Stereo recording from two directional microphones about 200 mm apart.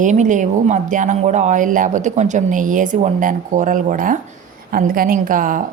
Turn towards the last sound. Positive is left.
turn(degrees=-45)  # may be behind; listen again after turning